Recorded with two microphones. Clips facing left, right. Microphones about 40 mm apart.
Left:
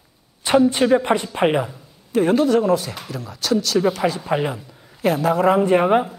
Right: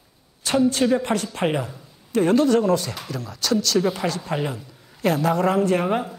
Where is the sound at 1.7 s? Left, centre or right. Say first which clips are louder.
Left 2 dB; centre.